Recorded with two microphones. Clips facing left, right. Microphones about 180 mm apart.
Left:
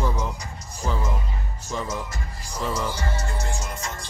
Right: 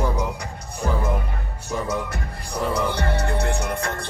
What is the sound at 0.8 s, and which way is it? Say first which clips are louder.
Music: right 4 dB; 60° right (ahead or behind).